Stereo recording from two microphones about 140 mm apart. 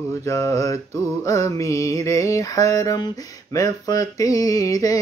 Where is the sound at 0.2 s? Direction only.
20° left (ahead or behind).